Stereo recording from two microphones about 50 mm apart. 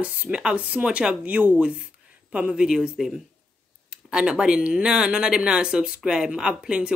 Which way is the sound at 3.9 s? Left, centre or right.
Centre.